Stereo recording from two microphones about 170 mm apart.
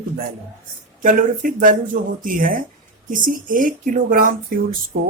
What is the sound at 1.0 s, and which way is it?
Speech, 55° right (ahead or behind).